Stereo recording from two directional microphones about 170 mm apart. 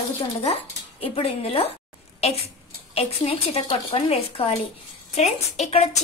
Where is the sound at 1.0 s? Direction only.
35° left (ahead or behind).